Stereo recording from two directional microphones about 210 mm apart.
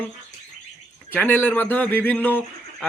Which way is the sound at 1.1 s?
10° left (ahead or behind).